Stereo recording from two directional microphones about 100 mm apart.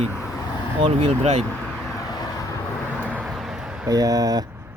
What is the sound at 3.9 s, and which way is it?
Speech, 40° right (ahead or behind).